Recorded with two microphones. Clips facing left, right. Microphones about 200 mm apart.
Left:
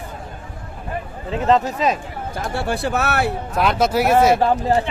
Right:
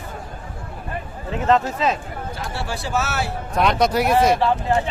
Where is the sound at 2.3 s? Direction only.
55° left (ahead or behind).